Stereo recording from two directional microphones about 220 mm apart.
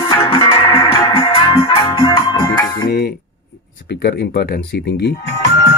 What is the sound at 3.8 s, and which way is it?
Speech, 50° left (ahead or behind).